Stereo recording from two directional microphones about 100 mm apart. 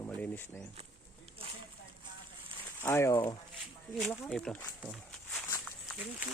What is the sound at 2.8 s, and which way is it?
Speech, 25° left (ahead or behind).